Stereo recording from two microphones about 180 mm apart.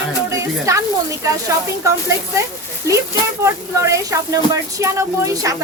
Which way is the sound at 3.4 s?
15° right (ahead or behind).